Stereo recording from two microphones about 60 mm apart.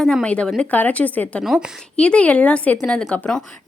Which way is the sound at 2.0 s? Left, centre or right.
Left.